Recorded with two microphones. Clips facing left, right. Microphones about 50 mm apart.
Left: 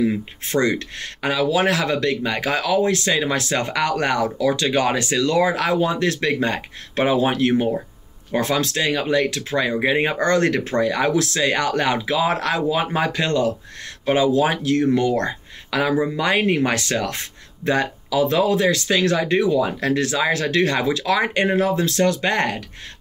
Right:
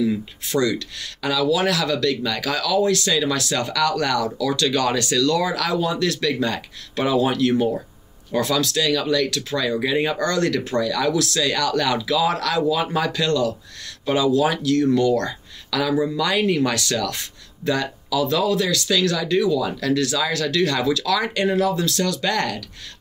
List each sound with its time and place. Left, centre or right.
0.0 s speech: left